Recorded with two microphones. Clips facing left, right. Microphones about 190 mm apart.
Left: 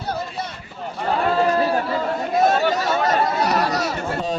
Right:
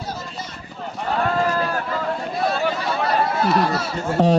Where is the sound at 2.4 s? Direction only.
45° left (ahead or behind).